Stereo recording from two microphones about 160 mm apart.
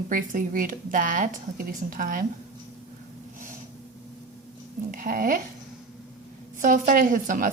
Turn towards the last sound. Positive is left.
turn(degrees=-55)  # may be behind; listen again after turning